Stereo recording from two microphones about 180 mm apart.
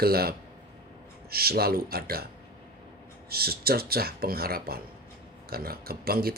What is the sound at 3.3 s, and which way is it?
Speech, 60° right (ahead or behind).